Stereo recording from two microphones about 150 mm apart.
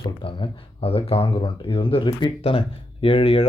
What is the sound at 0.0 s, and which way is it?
Speech, 35° left (ahead or behind).